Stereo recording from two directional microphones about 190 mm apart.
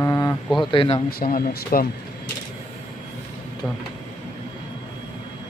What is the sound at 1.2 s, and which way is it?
Speech, 50° left (ahead or behind).